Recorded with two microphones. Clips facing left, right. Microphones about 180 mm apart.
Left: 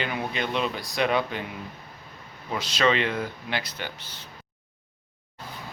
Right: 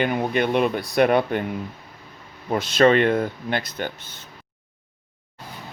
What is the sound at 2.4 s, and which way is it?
Speech, 50° right (ahead or behind).